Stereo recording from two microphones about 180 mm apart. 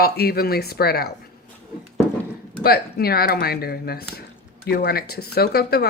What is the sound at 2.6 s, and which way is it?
Speech, 60° left (ahead or behind).